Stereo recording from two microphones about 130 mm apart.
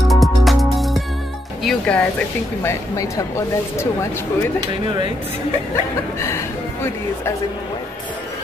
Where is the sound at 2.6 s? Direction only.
25° left (ahead or behind).